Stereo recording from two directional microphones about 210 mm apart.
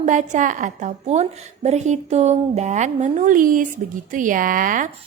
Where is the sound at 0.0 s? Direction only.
35° right (ahead or behind).